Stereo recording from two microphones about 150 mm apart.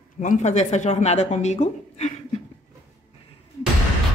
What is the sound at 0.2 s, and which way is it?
Speech, 55° left (ahead or behind).